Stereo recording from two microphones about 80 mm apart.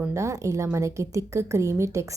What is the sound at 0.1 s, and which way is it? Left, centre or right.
A woman's voice, right.